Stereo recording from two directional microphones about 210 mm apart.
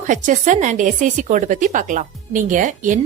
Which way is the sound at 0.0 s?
35° right (ahead or behind).